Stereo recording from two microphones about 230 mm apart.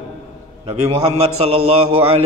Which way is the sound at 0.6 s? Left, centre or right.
Right.